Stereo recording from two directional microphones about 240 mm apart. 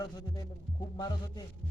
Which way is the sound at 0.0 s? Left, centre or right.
Centre.